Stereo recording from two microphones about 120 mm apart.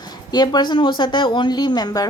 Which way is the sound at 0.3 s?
35° left (ahead or behind).